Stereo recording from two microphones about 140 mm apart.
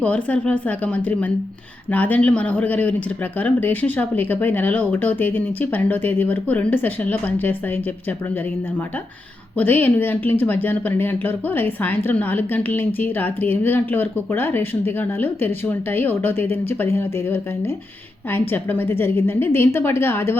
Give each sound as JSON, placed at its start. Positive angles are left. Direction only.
{"t": 0.0, "sound": "speech", "side_deg": 10}
{"t": 9.6, "sound": "speech", "side_deg": 10}